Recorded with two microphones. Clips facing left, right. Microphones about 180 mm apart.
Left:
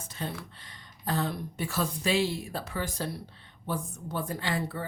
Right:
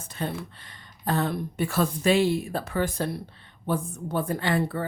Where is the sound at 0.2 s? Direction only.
55° right (ahead or behind).